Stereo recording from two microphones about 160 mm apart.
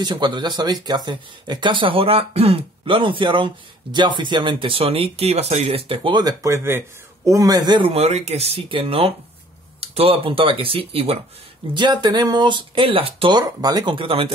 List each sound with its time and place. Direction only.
0.0 s speech: 30° right (ahead or behind)